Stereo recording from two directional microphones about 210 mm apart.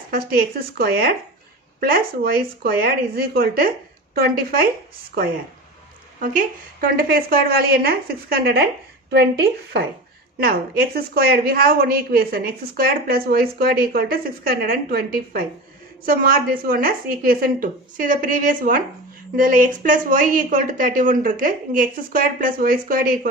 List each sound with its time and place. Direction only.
0.8 s a woman's voice: 45° right (ahead or behind)
6.1 s a woman's voice: 40° right (ahead or behind)